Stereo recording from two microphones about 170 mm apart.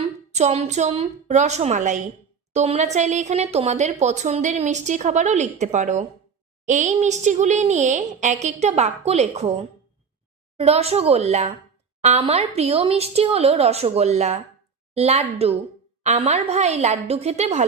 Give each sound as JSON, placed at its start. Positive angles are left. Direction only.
{"t": 0.0, "sound": "a woman's voice", "side_deg": -40}
{"t": 10.6, "sound": "speech", "side_deg": -35}